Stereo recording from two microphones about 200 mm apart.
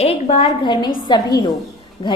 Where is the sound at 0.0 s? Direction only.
30° left (ahead or behind).